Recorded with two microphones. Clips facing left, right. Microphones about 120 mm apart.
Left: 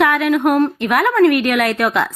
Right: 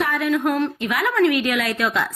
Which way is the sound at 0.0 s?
70° left (ahead or behind).